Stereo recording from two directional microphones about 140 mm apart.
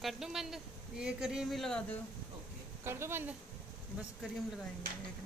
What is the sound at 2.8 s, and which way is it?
Speech, 15° right (ahead or behind).